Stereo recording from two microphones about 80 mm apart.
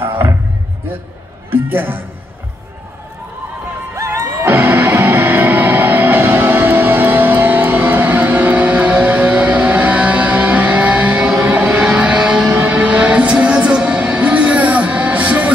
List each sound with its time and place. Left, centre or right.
0.0 s speech: right
1.5 s a man's voice: right
3.9 s music: right; by 15.5 s centre